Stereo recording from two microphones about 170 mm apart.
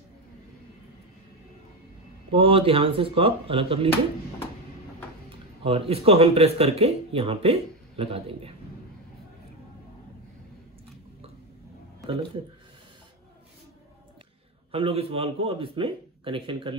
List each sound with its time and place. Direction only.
2.3 s speech: 30° right (ahead or behind)
5.6 s speech: 35° right (ahead or behind)
14.7 s speech: 35° right (ahead or behind)